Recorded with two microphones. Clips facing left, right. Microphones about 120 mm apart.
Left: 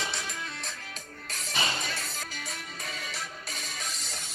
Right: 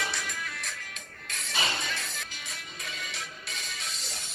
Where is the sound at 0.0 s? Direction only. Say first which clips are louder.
Right 1 dB; 30° left (ahead or behind).